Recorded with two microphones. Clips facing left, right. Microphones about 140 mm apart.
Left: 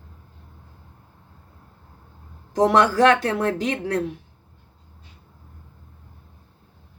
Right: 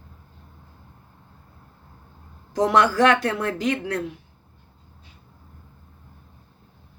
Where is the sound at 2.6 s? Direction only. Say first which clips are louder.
Left 2 dB; 35° left (ahead or behind).